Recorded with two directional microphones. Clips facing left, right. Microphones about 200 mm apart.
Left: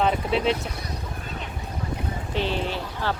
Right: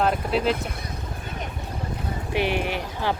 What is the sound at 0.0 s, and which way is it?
Speech, centre (ahead or behind).